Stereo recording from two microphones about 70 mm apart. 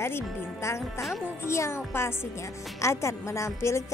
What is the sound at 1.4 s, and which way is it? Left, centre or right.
A woman's voice, left.